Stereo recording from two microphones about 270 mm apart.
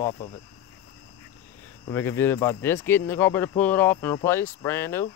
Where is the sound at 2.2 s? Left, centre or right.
Centre.